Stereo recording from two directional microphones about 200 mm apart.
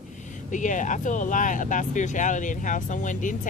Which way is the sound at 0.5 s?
40° left (ahead or behind).